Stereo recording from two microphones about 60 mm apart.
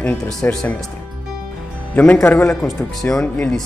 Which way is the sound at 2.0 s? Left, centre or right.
Left.